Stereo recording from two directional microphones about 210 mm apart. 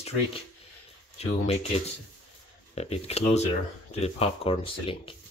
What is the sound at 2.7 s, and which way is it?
Speech, 30° left (ahead or behind).